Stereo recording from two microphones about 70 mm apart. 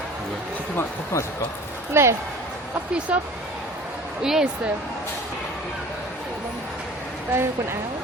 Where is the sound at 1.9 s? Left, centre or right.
Right.